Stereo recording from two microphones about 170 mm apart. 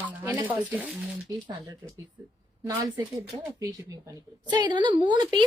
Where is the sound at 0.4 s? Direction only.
10° right (ahead or behind).